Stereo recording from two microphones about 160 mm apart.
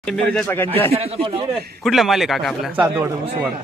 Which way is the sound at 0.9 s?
40° right (ahead or behind).